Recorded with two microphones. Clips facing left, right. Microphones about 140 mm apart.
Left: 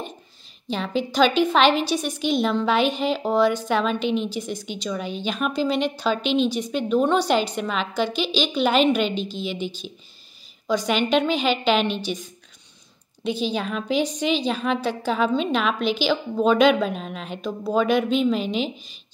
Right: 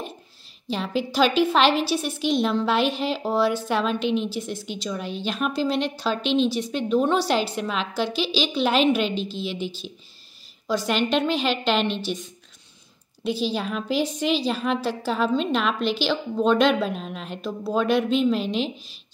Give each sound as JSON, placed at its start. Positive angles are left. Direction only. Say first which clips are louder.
{"t": 0.7, "sound": "a woman's voice", "louder": "left 1 dB", "side_deg": -5}